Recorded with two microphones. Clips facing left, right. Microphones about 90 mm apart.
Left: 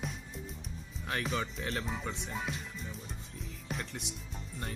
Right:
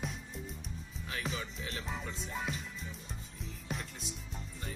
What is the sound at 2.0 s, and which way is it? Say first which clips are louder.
Music: left 3 dB; 70° left (ahead or behind).